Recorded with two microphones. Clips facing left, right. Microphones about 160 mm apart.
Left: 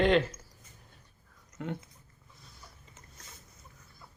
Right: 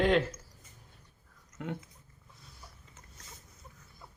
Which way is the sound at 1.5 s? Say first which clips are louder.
Left 1 dB; centre (ahead or behind).